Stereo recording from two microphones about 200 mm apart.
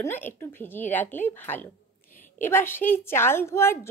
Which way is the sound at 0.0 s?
10° left (ahead or behind).